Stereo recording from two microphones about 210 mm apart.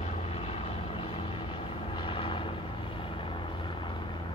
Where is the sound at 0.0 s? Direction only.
30° left (ahead or behind).